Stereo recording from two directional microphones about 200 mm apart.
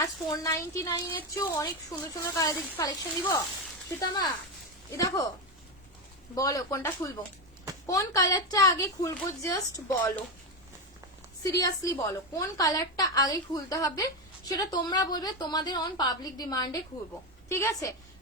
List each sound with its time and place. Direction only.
0.0 s a woman's voice: 15° left (ahead or behind)
4.9 s a woman's voice: 15° left (ahead or behind)
6.3 s a woman's voice: 15° left (ahead or behind)
11.4 s a woman's voice: 15° left (ahead or behind)